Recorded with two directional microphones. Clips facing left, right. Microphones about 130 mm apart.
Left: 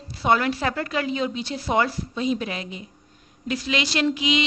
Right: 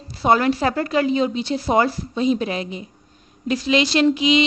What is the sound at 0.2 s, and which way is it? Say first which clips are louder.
A woman's voice: right 4 dB; 35° right (ahead or behind).